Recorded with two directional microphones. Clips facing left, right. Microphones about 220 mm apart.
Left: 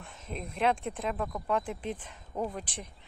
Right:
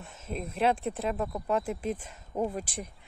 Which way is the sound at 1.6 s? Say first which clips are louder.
Right 4 dB; 5° right (ahead or behind).